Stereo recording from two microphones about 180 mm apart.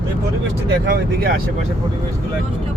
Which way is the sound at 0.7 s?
60° right (ahead or behind).